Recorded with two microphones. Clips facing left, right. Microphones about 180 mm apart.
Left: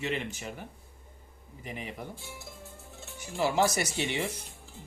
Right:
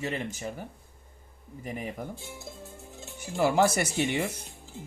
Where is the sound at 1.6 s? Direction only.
45° right (ahead or behind).